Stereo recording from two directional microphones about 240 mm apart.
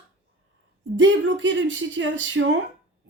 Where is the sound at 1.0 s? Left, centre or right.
Right.